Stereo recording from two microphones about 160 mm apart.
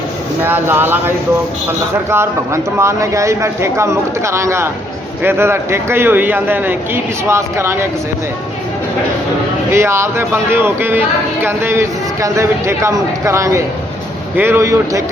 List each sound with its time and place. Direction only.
0.4 s speech: 15° right (ahead or behind)
9.7 s speech: 15° right (ahead or behind)